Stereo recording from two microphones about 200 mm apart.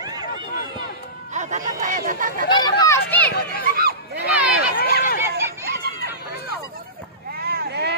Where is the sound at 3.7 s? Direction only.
50° right (ahead or behind).